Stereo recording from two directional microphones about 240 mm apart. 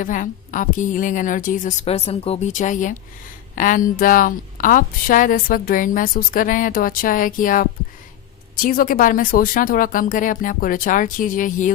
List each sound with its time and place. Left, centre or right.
0.0 s a woman's voice: left